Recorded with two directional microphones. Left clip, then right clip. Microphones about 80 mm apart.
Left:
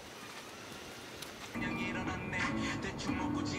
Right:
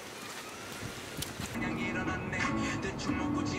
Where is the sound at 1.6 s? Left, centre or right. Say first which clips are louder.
Right 2 dB; left.